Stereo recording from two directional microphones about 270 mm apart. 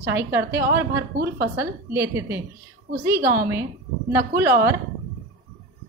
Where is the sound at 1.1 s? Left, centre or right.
Right.